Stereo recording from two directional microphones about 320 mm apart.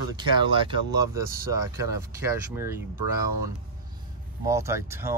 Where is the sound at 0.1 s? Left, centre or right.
Centre.